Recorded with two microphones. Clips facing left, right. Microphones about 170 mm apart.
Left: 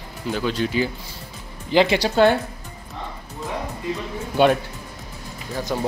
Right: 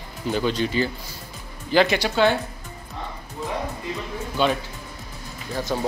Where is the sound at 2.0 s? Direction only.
45° left (ahead or behind).